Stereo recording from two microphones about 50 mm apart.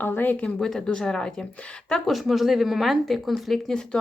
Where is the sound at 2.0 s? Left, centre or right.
Centre.